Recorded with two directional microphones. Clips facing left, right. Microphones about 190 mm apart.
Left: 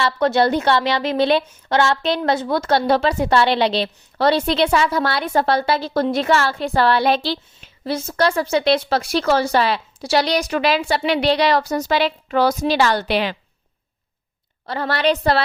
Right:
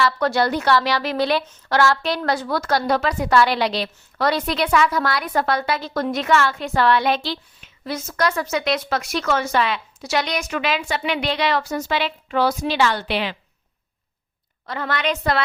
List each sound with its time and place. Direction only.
0.0 s a woman's voice: 25° left (ahead or behind); by 13.3 s 40° left (ahead or behind)
14.7 s a woman's voice: 35° left (ahead or behind)